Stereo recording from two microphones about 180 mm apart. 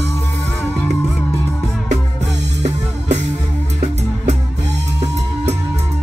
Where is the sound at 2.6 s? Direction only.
40° right (ahead or behind).